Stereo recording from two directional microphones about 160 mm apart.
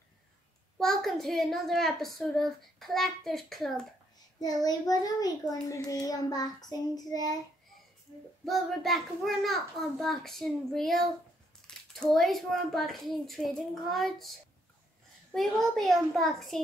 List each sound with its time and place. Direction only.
0.7 s a child's voice: centre (ahead or behind)
4.4 s child singing: 25° left (ahead or behind)
8.5 s a child's voice: centre (ahead or behind)
15.3 s a child's voice: centre (ahead or behind)